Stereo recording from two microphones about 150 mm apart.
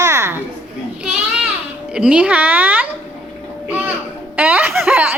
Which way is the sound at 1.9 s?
5° right (ahead or behind).